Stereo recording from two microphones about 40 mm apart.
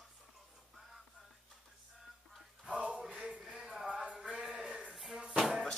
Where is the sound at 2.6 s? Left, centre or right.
Right.